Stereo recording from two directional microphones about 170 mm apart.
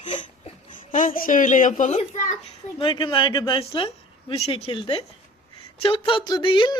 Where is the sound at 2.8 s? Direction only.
30° left (ahead or behind).